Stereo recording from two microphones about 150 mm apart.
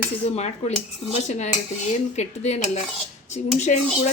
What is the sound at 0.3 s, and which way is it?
Cutlery, 45° left (ahead or behind).